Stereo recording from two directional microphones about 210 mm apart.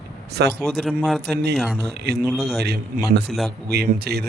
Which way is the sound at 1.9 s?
50° right (ahead or behind).